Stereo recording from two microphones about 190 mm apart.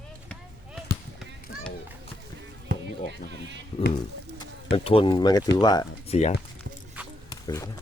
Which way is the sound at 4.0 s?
25° left (ahead or behind).